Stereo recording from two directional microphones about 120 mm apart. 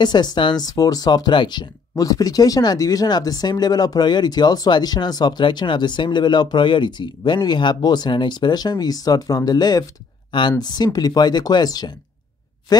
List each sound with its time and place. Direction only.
0.0 s speech: 35° left (ahead or behind)